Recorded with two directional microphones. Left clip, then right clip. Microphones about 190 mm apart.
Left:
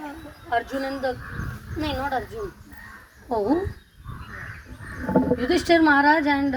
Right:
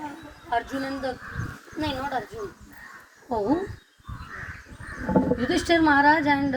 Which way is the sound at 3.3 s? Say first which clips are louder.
Left 2 dB; 35° left (ahead or behind).